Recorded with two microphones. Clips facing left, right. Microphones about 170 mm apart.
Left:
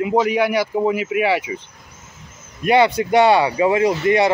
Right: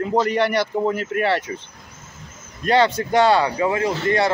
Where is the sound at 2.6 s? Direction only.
10° left (ahead or behind).